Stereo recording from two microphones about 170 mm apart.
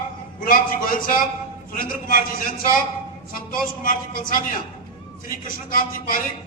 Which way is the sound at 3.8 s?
55° left (ahead or behind).